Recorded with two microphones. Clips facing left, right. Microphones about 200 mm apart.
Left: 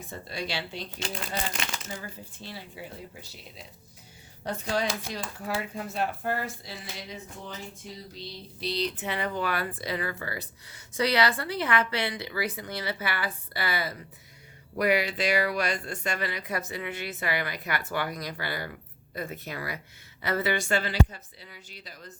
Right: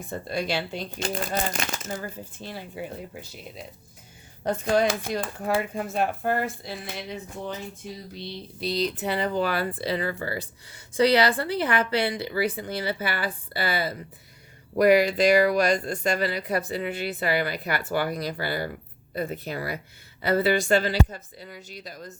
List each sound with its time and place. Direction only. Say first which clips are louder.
0.1 s speech: right 7 dB; 50° right (ahead or behind)
8.6 s speech: right 4 dB; 45° right (ahead or behind); by 14.0 s 30° right (ahead or behind)
14.8 s speech: right 7 dB; 40° right (ahead or behind)